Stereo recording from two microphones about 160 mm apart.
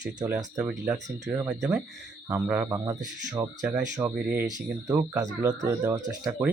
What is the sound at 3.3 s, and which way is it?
Speech, 15° right (ahead or behind).